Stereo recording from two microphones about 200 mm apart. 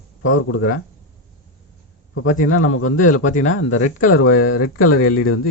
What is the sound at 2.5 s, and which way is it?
Speech, 90° left.